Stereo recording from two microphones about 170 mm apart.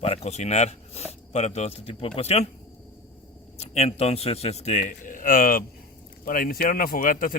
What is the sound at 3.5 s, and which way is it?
Speech, 40° left (ahead or behind).